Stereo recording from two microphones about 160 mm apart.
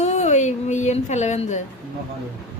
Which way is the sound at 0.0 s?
45° left (ahead or behind).